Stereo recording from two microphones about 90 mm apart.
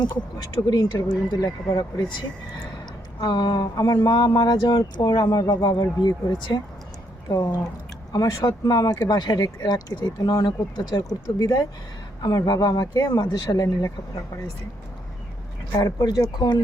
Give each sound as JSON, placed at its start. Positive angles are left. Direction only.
{"t": 0.0, "sound": "speech", "side_deg": 55}
{"t": 3.2, "sound": "speech", "side_deg": 50}
{"t": 15.7, "sound": "speech", "side_deg": 45}